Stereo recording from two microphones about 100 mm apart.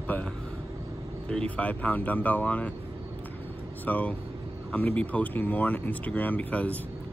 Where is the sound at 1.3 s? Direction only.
15° left (ahead or behind).